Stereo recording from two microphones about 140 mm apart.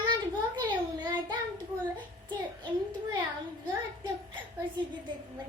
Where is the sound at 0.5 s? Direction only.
30° right (ahead or behind).